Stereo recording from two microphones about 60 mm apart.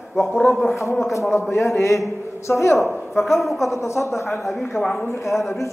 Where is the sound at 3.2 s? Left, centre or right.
Centre.